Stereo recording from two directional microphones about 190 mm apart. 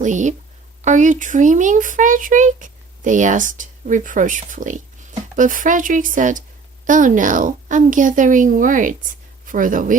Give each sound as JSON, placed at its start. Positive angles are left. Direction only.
{"t": 0.0, "sound": "a woman's voice", "side_deg": -40}